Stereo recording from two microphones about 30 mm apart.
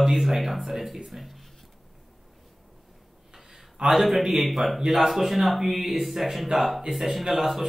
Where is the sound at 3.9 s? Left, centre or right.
Centre.